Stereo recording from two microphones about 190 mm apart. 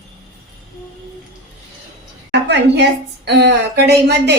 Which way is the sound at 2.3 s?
65° right (ahead or behind).